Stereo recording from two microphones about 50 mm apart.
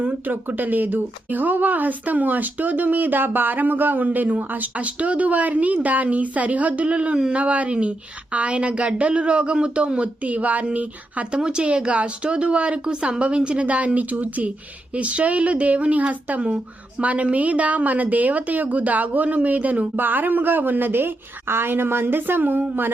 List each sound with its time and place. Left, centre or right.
0.0 s speech: right
20.0 s a woman's voice: right